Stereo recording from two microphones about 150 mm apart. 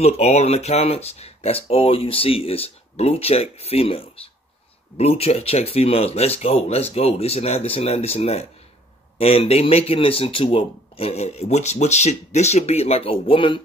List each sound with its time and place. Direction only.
0.0 s speech: 45° left (ahead or behind)